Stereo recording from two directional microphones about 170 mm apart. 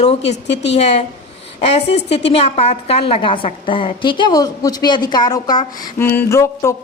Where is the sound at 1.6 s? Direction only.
40° left (ahead or behind).